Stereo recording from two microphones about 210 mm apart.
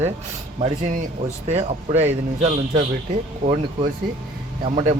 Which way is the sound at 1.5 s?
30° right (ahead or behind).